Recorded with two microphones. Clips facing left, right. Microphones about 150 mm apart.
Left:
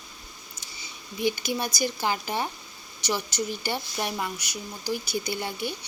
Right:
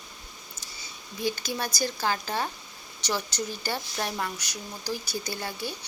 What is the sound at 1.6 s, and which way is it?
Speech, 15° left (ahead or behind).